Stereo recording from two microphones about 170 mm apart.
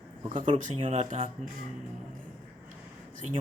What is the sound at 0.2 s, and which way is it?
Speech, 30° right (ahead or behind).